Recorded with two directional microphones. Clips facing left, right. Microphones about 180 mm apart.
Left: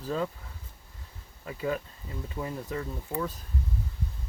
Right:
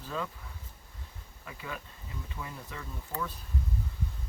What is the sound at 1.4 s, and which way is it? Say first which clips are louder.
Speech: left 11 dB; 40° left (ahead or behind).